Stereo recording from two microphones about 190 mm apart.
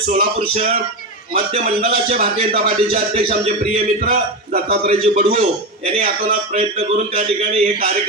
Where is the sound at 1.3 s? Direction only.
30° right (ahead or behind).